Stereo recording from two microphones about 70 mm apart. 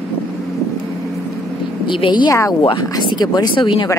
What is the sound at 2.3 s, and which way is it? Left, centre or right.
Speech, left.